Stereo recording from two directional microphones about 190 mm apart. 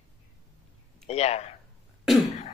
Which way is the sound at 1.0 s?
35° left (ahead or behind).